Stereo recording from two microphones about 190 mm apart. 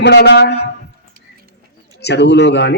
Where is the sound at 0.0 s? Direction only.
65° left (ahead or behind).